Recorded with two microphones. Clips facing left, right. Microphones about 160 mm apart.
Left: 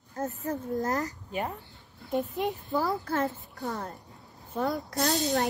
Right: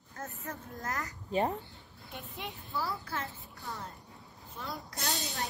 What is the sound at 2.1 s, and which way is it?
A child's voice, 45° left (ahead or behind).